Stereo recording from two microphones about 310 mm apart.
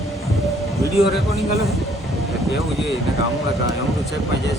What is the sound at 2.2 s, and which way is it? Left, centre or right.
Vehicle, centre.